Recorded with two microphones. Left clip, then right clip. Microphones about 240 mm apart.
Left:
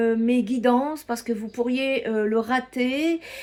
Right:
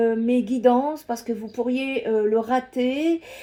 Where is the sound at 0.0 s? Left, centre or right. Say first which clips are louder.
Right 1 dB; left.